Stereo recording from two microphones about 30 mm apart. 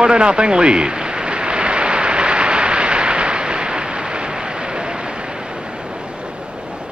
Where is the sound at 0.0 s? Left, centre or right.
Right.